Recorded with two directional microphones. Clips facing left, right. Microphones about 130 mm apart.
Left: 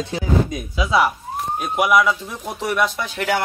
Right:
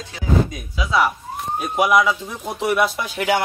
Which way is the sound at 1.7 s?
Centre (ahead or behind).